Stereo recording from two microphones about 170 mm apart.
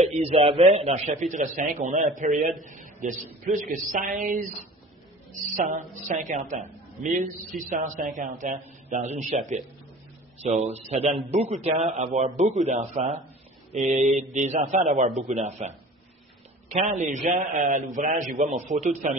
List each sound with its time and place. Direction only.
0.0 s a woman's voice: 40° right (ahead or behind)
5.7 s a woman's voice: 45° right (ahead or behind)
16.9 s a woman's voice: 45° right (ahead or behind)